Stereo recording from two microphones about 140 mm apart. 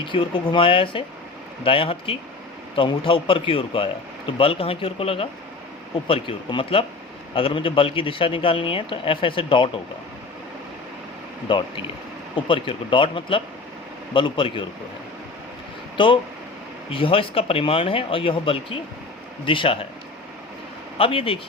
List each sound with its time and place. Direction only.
0.0 s speech: 35° left (ahead or behind)
11.4 s speech: 35° left (ahead or behind)
16.9 s speech: 40° left (ahead or behind)
21.0 s speech: 40° left (ahead or behind)